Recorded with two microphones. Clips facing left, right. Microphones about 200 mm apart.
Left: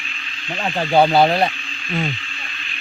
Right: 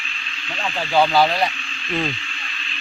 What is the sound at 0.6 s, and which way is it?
Speech, 30° left (ahead or behind).